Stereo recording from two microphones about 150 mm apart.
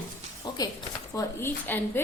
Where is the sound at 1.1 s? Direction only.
20° left (ahead or behind).